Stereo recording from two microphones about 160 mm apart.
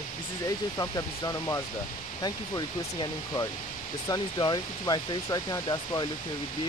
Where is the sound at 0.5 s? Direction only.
25° left (ahead or behind).